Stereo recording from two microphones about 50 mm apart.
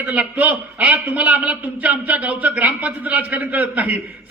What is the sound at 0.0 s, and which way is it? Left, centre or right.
A man's voice, right.